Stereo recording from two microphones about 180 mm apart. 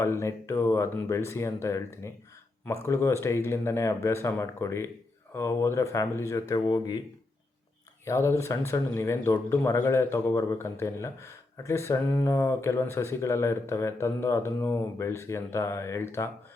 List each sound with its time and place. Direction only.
0.0 s speech: 15° left (ahead or behind)
8.0 s speech: 15° left (ahead or behind)